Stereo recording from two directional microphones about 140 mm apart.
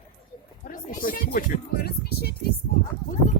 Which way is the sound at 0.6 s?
90° left.